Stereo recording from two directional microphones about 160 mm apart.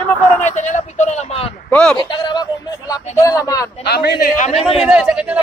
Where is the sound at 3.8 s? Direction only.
85° left; by 4.5 s 60° left (ahead or behind).